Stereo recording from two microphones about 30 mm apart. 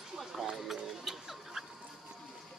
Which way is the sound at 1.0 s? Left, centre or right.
Centre.